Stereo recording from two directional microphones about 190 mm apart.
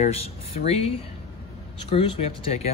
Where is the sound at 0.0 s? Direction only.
35° left (ahead or behind).